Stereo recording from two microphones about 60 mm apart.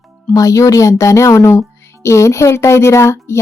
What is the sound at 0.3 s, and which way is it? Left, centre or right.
Speech, left.